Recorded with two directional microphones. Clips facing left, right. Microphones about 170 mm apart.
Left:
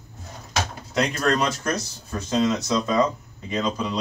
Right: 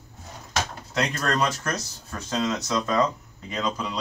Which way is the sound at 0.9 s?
10° left (ahead or behind).